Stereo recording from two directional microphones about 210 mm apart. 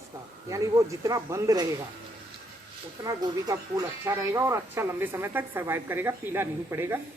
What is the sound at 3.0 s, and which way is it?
Speech, 15° right (ahead or behind).